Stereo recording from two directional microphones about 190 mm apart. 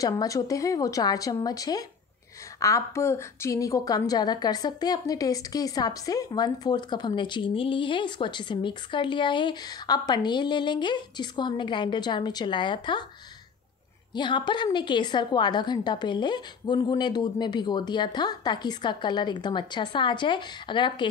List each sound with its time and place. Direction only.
0.0 s a woman's voice: 20° left (ahead or behind)
14.1 s a woman's voice: 25° left (ahead or behind)